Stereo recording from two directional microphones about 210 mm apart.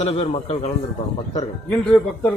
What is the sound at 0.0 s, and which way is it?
Speech, 30° left (ahead or behind).